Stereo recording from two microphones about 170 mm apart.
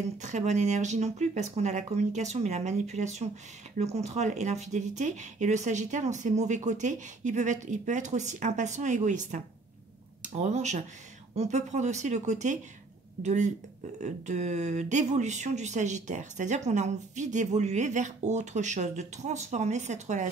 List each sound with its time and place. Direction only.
0.2 s speech: 45° right (ahead or behind)